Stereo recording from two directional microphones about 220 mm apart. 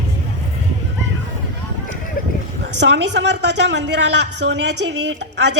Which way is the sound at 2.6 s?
50° right (ahead or behind).